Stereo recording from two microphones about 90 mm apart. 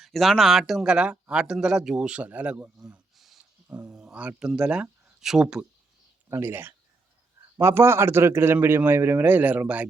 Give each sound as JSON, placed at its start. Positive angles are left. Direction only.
{"t": 0.0, "sound": "a man's voice", "side_deg": 0}
{"t": 6.3, "sound": "speech", "side_deg": -25}